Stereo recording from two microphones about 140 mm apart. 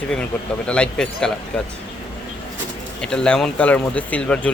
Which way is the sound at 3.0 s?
5° left (ahead or behind).